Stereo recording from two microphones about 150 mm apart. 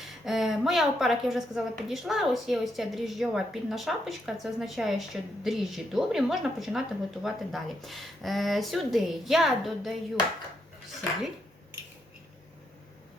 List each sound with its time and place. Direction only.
0.0 s a woman's voice: centre (ahead or behind)